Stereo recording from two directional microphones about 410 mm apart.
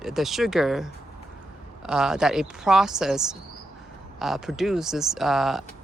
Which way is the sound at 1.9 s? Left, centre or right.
Centre.